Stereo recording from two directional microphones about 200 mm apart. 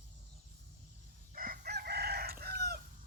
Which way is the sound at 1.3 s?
45° right (ahead or behind).